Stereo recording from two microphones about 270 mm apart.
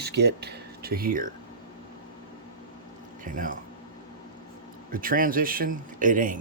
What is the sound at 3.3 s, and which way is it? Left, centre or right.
Speech, right.